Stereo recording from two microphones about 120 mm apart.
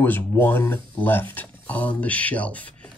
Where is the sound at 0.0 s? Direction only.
15° left (ahead or behind).